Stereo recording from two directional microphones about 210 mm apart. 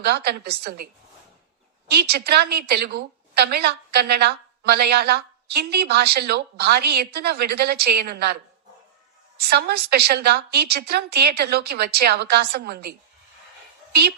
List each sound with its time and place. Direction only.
0.0 s a woman's voice: 50° right (ahead or behind)
1.9 s a woman's voice: 50° right (ahead or behind)
9.5 s a woman's voice: 50° right (ahead or behind)